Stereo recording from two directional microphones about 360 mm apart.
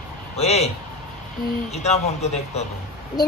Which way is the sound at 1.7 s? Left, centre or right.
Centre.